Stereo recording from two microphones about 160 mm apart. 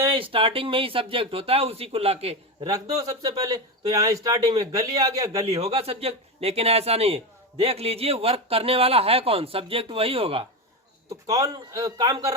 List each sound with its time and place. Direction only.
0.0 s speech: 35° right (ahead or behind)
2.9 s a man's voice: 20° right (ahead or behind)
5.5 s speech: 40° right (ahead or behind)
11.1 s a man's voice: 20° right (ahead or behind)